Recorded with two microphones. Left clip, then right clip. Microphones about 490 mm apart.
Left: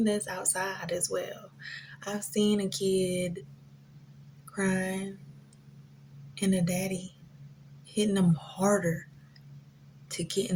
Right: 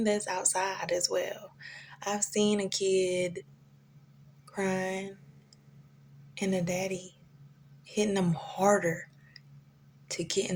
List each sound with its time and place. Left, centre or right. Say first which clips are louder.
0.0 s speech: right 1 dB; right
4.5 s speech: even; right
6.3 s a woman's voice: even; right